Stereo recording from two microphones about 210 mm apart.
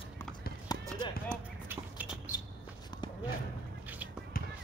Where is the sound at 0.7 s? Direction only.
20° left (ahead or behind).